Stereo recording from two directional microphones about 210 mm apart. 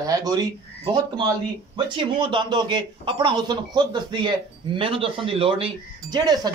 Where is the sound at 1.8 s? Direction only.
20° right (ahead or behind).